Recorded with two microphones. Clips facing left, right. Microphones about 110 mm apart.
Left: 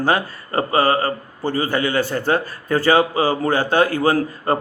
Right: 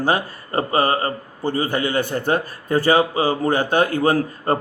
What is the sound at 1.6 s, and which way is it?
A man's voice, 20° right (ahead or behind).